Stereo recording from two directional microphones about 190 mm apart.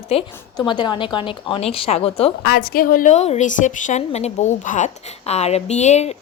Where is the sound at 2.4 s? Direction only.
55° left (ahead or behind).